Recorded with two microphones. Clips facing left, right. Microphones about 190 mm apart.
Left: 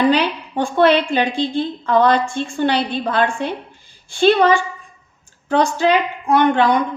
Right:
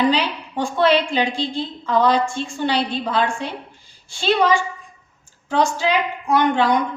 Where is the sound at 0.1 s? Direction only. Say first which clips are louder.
Left 4 dB; 55° left (ahead or behind).